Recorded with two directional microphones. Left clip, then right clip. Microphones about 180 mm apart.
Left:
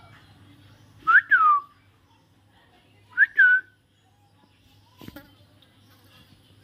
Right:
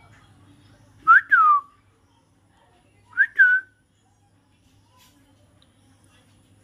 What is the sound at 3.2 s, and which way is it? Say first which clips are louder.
Whistling: even; centre (ahead or behind).